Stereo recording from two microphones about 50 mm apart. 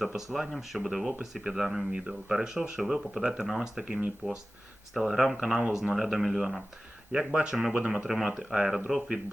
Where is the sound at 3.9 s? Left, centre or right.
Right.